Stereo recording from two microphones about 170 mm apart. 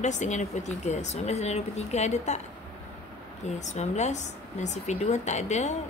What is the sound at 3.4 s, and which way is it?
Speech, 45° left (ahead or behind).